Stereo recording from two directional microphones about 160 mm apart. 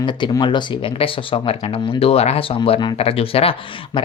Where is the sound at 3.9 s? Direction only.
30° left (ahead or behind).